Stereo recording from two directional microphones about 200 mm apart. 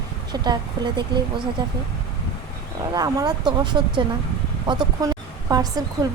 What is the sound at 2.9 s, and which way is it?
A woman's voice, 20° right (ahead or behind).